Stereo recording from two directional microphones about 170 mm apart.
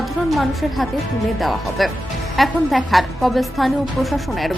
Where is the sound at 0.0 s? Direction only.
Centre (ahead or behind).